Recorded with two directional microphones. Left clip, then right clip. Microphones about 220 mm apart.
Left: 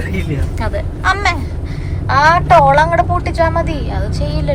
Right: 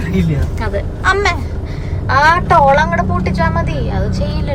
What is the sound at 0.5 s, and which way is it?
A woman's voice, 10° right (ahead or behind).